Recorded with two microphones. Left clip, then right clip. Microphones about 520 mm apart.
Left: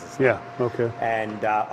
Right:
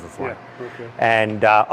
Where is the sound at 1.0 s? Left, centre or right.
Right.